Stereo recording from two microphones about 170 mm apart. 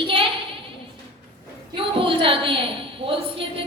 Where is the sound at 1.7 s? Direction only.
30° right (ahead or behind).